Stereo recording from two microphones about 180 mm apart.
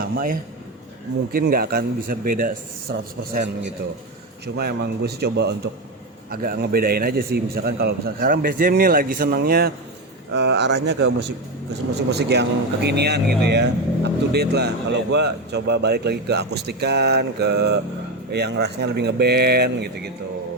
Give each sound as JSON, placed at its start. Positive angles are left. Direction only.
{"t": 1.3, "sound": "a man's voice", "side_deg": -55}
{"t": 2.9, "sound": "a man's voice", "side_deg": -70}
{"t": 4.5, "sound": "a man's voice", "side_deg": -65}
{"t": 10.3, "sound": "a man's voice", "side_deg": -75}